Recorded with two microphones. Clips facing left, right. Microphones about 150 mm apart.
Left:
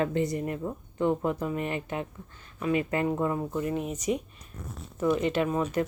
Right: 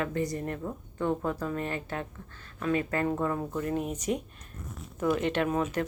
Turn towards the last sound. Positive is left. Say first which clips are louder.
# left 1 dB
turn(degrees=0)  # may be behind; listen again after turning